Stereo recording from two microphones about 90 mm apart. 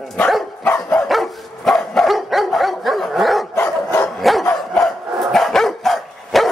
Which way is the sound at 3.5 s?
25° left (ahead or behind).